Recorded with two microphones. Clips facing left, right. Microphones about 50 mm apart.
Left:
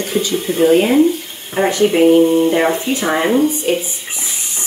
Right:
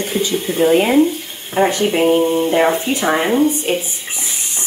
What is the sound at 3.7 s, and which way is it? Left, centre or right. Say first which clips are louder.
Speech: left 2 dB; right.